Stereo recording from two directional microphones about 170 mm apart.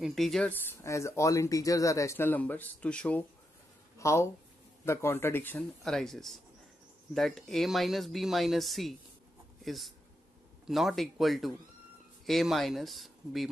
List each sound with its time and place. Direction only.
0.0 s speech: centre (ahead or behind)